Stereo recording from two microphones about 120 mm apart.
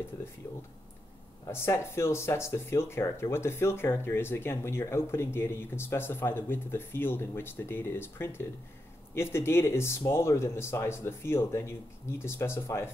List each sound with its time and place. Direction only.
1.5 s speech: 20° left (ahead or behind)